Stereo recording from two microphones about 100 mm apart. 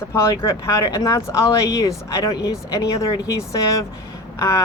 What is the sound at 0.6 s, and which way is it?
Speech, 35° left (ahead or behind).